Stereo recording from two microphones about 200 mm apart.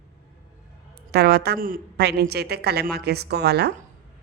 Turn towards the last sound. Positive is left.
turn(degrees=-55)  # may be behind; listen again after turning